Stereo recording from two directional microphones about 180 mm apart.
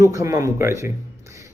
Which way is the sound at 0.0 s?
15° right (ahead or behind).